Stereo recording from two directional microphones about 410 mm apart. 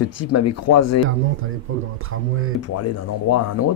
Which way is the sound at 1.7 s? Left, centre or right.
Right.